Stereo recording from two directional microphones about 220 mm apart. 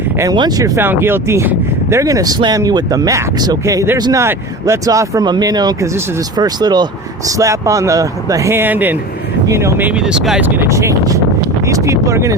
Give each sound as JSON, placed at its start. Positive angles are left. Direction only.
{"t": 0.2, "sound": "speech", "side_deg": -20}